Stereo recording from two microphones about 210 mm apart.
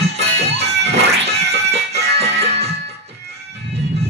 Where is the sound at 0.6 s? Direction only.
55° right (ahead or behind).